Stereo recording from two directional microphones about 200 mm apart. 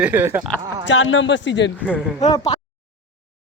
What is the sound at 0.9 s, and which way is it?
Speech, 70° left (ahead or behind).